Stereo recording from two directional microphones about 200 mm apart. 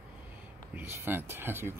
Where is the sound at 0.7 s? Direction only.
10° right (ahead or behind).